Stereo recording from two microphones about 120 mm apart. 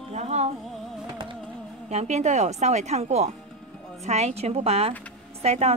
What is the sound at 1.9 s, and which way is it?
A woman's voice, 65° right (ahead or behind).